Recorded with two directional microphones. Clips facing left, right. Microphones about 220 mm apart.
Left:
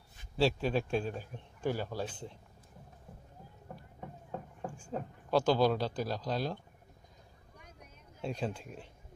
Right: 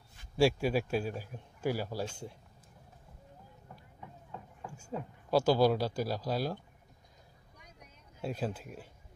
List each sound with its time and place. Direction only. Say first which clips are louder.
0.4 s speech: right 2 dB; 10° right (ahead or behind)
4.0 s a sound: left 5 dB; 45° left (ahead or behind)
4.7 s speech: right 3 dB; 10° right (ahead or behind)
8.2 s speech: right 1 dB; 5° right (ahead or behind)